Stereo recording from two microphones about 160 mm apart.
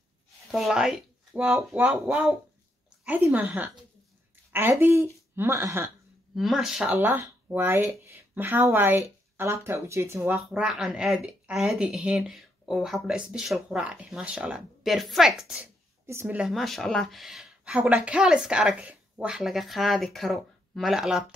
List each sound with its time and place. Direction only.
0.5 s speech: centre (ahead or behind); by 5.9 s 15° right (ahead or behind)
6.3 s speech: centre (ahead or behind)
10.5 s speech: 5° right (ahead or behind)